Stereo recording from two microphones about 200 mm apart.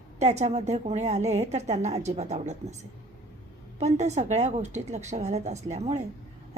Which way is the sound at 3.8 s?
35° right (ahead or behind).